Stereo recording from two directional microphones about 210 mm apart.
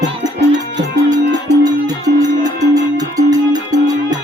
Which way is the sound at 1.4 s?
15° right (ahead or behind).